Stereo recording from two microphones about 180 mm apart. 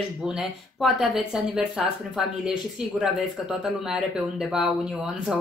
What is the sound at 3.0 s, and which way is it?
Speech, 5° right (ahead or behind).